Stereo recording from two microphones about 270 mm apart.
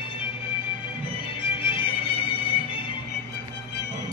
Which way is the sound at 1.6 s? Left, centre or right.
Centre.